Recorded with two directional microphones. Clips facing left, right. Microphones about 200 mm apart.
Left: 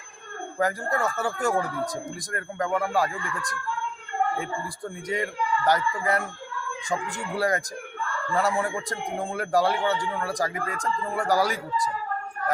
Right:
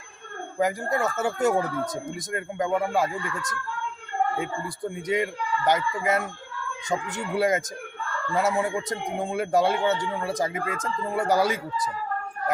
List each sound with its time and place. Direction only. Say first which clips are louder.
0.6 s speech: right 1 dB; 20° right (ahead or behind)